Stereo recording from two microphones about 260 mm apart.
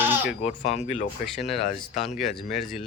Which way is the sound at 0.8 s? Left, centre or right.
Left.